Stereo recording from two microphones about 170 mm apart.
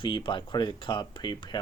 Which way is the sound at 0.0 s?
30° left (ahead or behind).